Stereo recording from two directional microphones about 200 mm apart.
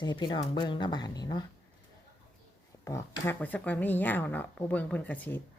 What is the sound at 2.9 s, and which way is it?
Speech, 15° left (ahead or behind).